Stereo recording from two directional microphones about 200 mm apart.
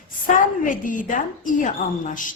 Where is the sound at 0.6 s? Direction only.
40° left (ahead or behind).